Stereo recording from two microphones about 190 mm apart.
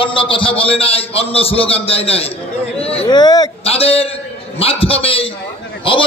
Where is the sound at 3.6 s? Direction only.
30° left (ahead or behind).